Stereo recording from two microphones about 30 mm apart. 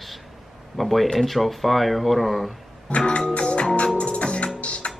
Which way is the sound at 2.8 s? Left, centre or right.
Left.